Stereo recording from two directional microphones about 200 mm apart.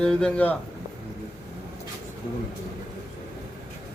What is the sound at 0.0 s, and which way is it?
Speech, 5° left (ahead or behind).